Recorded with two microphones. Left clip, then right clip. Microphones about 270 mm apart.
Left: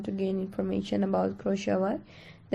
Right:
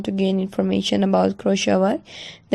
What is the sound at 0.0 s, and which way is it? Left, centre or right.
Speech, right.